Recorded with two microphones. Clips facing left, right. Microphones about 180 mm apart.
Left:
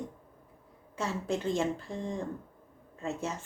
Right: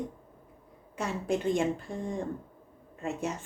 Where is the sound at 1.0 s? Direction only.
15° right (ahead or behind).